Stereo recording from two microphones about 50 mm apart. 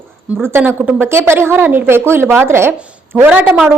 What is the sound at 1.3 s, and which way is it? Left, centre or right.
A woman's voice, right.